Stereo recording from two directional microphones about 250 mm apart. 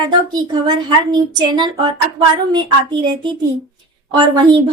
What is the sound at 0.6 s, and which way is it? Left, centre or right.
Speech, centre.